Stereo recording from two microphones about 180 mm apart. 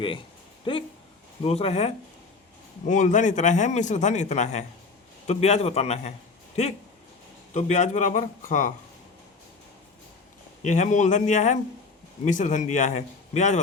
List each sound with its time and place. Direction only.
0.6 s a man's voice: 30° left (ahead or behind)
7.5 s speech: 40° left (ahead or behind)
10.6 s a man's voice: 40° left (ahead or behind)